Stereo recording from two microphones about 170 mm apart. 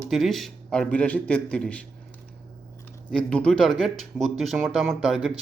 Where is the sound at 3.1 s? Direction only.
5° left (ahead or behind).